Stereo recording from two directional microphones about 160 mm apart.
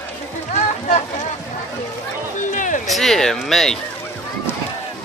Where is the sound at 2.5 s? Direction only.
55° left (ahead or behind).